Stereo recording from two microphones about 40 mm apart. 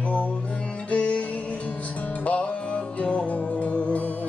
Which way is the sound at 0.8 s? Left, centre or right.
Left.